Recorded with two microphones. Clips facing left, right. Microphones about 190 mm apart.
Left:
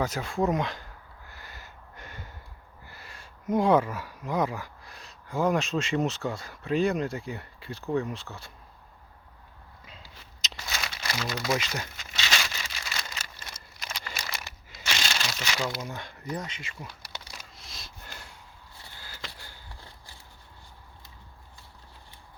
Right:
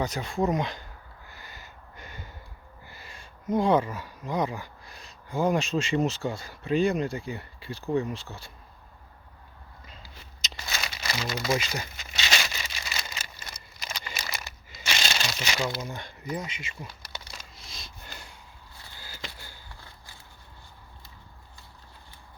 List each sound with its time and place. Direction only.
0.0 s speech: 5° left (ahead or behind)
1.3 s a sound: centre (ahead or behind)
2.9 s speech: centre (ahead or behind)
10.4 s crumpling: centre (ahead or behind)
12.1 s a sound: 15° right (ahead or behind); by 14.8 s centre (ahead or behind)
15.3 s speech: 15° right (ahead or behind)
15.8 s speech: centre (ahead or behind)
16.4 s speech: 15° right (ahead or behind)
17.3 s a sound: centre (ahead or behind)